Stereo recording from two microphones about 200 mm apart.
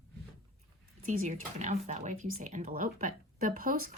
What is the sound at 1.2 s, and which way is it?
Speech, 40° right (ahead or behind).